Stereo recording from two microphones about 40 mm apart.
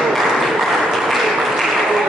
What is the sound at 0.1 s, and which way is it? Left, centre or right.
Applause, centre.